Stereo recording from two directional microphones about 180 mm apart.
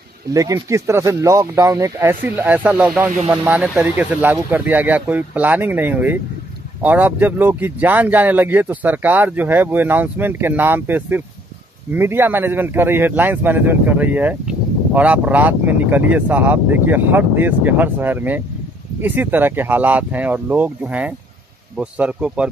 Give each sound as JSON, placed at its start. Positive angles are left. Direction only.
{"t": 0.3, "sound": "speech", "side_deg": -20}